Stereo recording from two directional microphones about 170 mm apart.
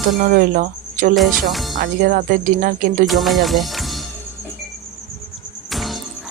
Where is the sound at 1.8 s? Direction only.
60° right (ahead or behind).